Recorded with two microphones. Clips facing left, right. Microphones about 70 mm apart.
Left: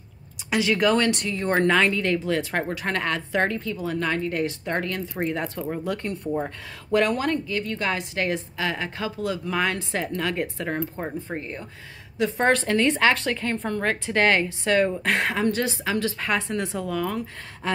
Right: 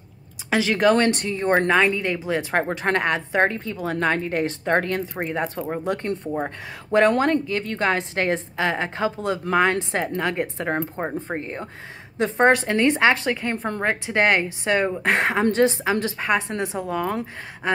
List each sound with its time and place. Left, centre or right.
0.7 s a woman's voice: right
1.7 s speech: centre
2.5 s a woman's voice: right
3.7 s a woman's voice: right
5.2 s a woman's voice: right